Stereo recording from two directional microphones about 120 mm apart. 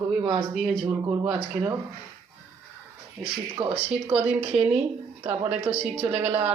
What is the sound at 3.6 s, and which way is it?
Speech, 50° right (ahead or behind).